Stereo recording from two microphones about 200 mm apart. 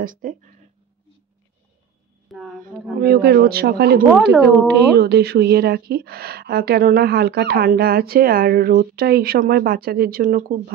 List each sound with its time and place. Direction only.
0.0 s speech: 40° right (ahead or behind)
2.2 s speech: centre (ahead or behind)
3.0 s speech: 50° right (ahead or behind)
4.1 s speech: 5° right (ahead or behind)
4.6 s speech: 55° right (ahead or behind)